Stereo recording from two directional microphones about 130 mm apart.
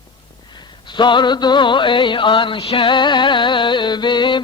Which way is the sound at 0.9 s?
35° left (ahead or behind).